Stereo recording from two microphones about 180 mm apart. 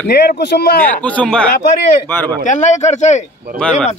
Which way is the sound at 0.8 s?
10° left (ahead or behind).